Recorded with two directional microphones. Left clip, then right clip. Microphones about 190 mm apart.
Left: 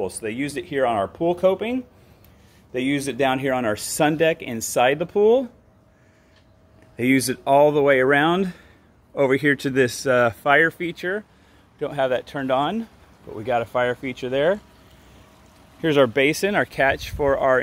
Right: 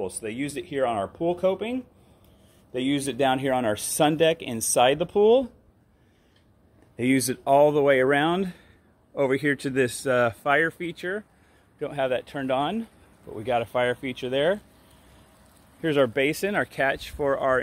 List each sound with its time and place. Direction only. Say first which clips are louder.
0.0 s speech: left 4 dB; centre (ahead or behind)
2.7 s speech: left 3 dB; 15° right (ahead or behind)
7.0 s speech: left 4 dB; 10° right (ahead or behind)
15.8 s speech: left 5 dB; 5° left (ahead or behind)